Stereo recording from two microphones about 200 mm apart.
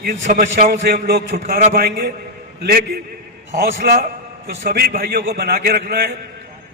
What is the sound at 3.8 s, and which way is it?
A man's voice, 50° right (ahead or behind).